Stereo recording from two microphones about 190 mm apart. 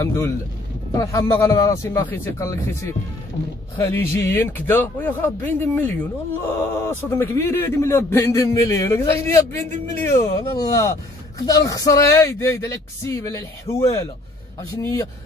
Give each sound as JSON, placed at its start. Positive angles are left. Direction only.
{"t": 0.0, "sound": "a man's voice", "side_deg": 15}